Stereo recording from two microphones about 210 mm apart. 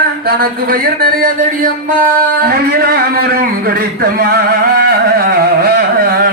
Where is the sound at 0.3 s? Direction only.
45° right (ahead or behind).